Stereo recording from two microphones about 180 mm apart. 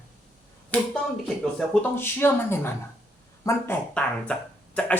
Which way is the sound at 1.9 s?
10° left (ahead or behind).